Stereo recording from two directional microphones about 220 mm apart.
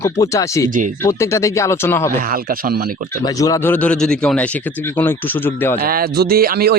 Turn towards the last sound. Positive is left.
turn(degrees=-45)  # may be behind; listen again after turning